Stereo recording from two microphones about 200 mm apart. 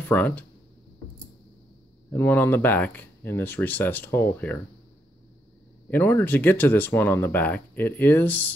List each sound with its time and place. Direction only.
0.1 s speech: 10° left (ahead or behind)
2.0 s speech: 10° left (ahead or behind)
5.9 s speech: 10° left (ahead or behind)